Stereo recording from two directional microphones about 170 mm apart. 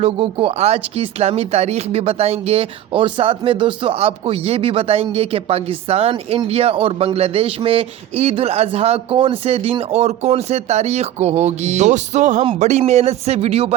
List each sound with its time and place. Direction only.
0.0 s speech: 35° right (ahead or behind)